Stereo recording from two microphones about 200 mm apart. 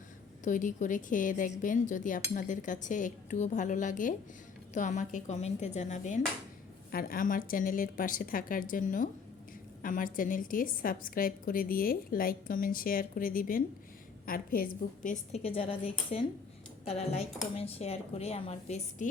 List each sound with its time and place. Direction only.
0.4 s a woman's voice: 40° left (ahead or behind)
15.4 s speech: 30° left (ahead or behind)